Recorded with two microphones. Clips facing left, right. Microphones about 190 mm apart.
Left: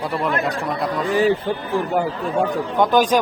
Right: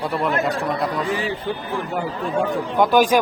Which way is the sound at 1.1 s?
40° left (ahead or behind).